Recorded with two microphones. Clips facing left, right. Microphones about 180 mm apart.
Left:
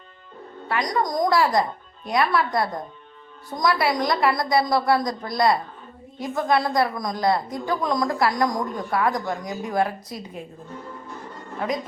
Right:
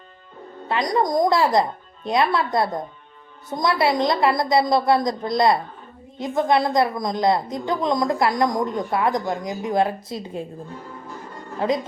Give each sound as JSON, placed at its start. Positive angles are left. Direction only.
{"t": 0.7, "sound": "a woman's voice", "side_deg": -25}